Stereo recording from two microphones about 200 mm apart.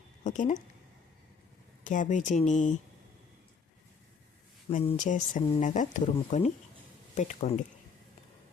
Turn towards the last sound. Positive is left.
turn(degrees=35)  # may be behind; listen again after turning